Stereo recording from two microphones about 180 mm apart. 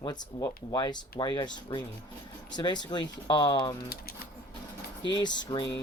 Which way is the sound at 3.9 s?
60° left (ahead or behind).